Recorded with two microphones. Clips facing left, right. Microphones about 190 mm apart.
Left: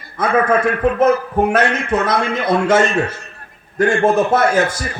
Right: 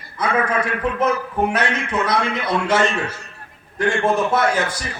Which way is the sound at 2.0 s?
50° left (ahead or behind).